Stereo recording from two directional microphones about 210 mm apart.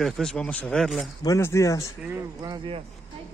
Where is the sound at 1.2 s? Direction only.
15° left (ahead or behind).